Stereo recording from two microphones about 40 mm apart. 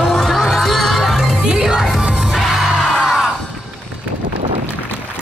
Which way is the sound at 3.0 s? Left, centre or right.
Centre.